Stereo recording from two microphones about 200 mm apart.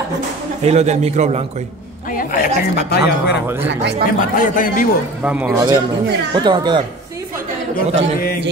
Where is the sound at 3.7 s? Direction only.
55° right (ahead or behind).